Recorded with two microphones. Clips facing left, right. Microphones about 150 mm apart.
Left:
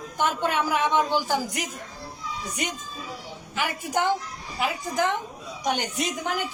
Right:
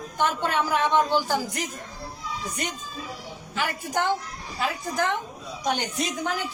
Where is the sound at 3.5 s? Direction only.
15° left (ahead or behind).